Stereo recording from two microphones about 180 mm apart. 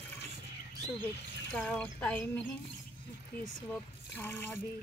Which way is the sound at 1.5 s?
5° left (ahead or behind).